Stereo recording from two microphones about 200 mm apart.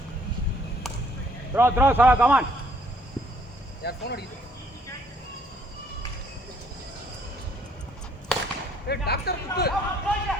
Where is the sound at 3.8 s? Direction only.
55° left (ahead or behind).